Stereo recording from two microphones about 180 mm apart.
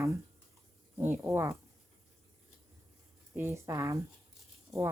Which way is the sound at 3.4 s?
15° right (ahead or behind).